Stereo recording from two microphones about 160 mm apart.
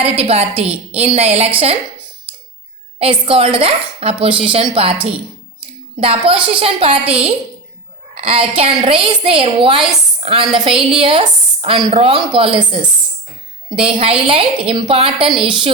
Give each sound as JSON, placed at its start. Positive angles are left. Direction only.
{"t": 0.0, "sound": "a woman's voice", "side_deg": -40}
{"t": 3.0, "sound": "a woman's voice", "side_deg": -35}
{"t": 6.0, "sound": "a woman's voice", "side_deg": -35}